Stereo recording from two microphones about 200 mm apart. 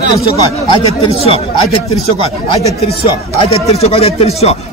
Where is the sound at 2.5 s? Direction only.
30° left (ahead or behind).